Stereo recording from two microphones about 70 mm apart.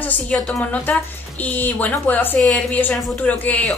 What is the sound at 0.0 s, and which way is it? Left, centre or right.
Speech, centre.